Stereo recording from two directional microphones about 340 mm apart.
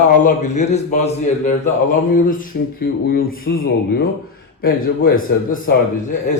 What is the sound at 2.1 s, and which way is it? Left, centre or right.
A man's voice, left.